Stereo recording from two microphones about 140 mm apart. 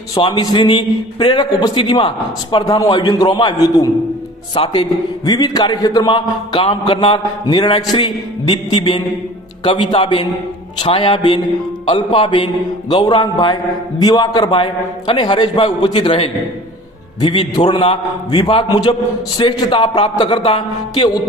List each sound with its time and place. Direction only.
0.2 s a man's voice: 35° left (ahead or behind)
2.6 s a man's voice: 25° left (ahead or behind); by 4.9 s 40° left (ahead or behind)
5.2 s a man's voice: 30° left (ahead or behind)